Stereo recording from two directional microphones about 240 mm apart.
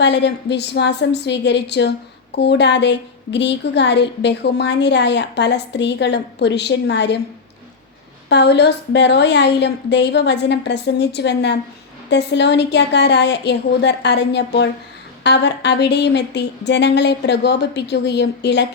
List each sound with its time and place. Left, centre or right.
0.0 s a woman's voice: left
8.3 s a woman's voice: left